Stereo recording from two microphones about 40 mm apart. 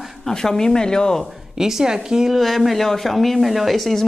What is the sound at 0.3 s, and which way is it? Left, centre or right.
Speech, centre.